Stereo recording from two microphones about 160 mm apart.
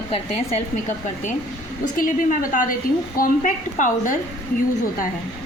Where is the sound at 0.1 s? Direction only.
40° left (ahead or behind).